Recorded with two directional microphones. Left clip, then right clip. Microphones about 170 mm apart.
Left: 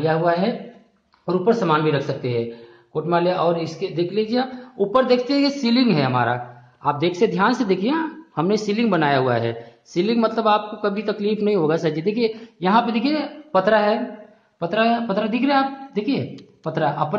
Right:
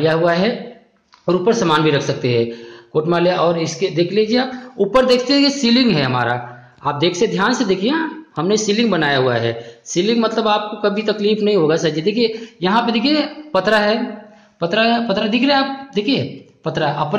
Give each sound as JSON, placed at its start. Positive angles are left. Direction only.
{"t": 0.0, "sound": "a woman's voice", "side_deg": -15}